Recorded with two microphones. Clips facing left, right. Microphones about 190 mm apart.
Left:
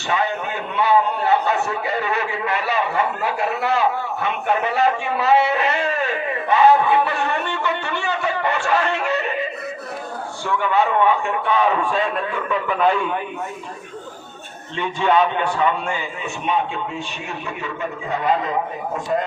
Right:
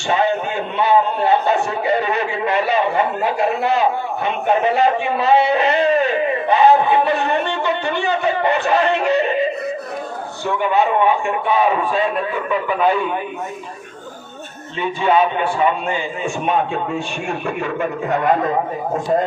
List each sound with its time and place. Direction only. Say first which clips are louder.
0.1 s a man's voice: right 5 dB; 30° right (ahead or behind)
6.5 s a sound: right 1 dB; 25° right (ahead or behind)
10.4 s a man's voice: right 2 dB; 15° right (ahead or behind)
14.8 s a man's voice: right 2 dB; 5° right (ahead or behind)
16.5 s a man's voice: right 2 dB; 45° right (ahead or behind)